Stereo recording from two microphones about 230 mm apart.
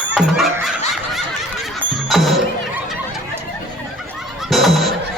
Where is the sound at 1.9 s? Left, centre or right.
Centre.